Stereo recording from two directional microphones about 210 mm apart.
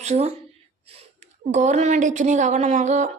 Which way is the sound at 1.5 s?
35° right (ahead or behind).